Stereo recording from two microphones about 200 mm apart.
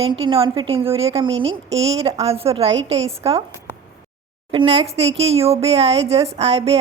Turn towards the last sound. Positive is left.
turn(degrees=-30)  # may be behind; listen again after turning